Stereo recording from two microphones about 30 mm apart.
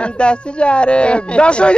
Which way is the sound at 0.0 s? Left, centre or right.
Left.